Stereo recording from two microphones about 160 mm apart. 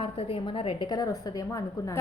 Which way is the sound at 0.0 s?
35° left (ahead or behind).